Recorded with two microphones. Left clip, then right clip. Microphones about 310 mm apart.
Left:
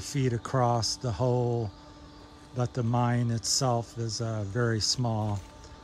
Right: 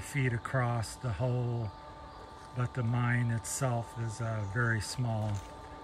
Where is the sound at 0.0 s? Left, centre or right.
Centre.